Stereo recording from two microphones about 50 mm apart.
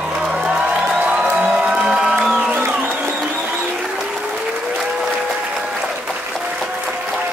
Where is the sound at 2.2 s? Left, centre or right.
Centre.